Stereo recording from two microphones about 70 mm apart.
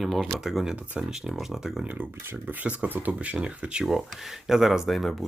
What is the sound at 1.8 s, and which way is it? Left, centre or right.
Speech, right.